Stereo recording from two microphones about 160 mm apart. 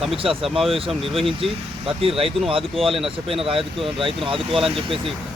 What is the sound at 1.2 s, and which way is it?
Speech, 35° right (ahead or behind).